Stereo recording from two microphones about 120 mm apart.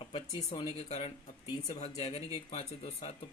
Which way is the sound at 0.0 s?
45° left (ahead or behind).